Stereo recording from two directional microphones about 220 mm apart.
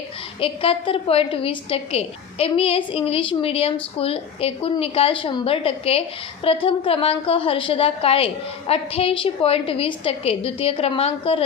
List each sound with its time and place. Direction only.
0.3 s a woman's voice: 25° left (ahead or behind)